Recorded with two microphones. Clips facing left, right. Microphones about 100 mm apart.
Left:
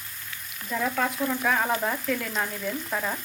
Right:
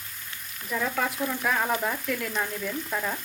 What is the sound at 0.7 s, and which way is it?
Frying, 5° left (ahead or behind).